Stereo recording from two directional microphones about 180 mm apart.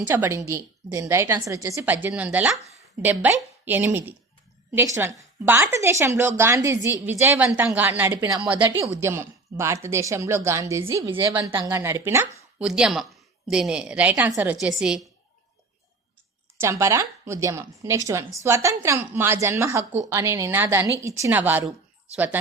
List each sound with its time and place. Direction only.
0.1 s a woman's voice: 15° right (ahead or behind)
16.6 s a woman's voice: 15° right (ahead or behind)